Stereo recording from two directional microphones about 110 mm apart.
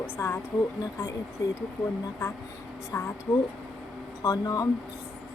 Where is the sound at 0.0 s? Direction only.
20° left (ahead or behind).